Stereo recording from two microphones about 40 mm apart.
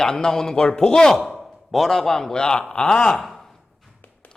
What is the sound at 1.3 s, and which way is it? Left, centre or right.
A man's voice, centre.